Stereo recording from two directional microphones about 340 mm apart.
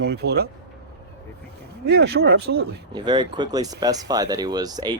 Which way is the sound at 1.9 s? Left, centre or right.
Right.